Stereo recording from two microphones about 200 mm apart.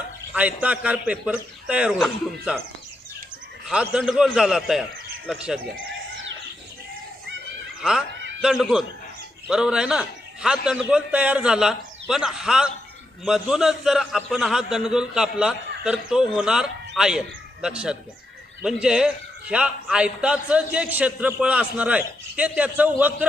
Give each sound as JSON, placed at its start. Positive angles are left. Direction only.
{"t": 0.3, "sound": "a man's voice", "side_deg": -5}
{"t": 3.7, "sound": "a man's voice", "side_deg": -5}
{"t": 7.8, "sound": "a man's voice", "side_deg": -5}